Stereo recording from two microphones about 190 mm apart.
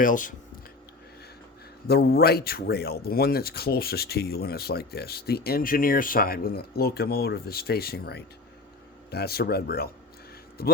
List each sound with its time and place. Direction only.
0.0 s speech: 45° left (ahead or behind)
1.9 s speech: 55° left (ahead or behind)